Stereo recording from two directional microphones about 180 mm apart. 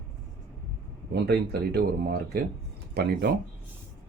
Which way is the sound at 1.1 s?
65° right (ahead or behind).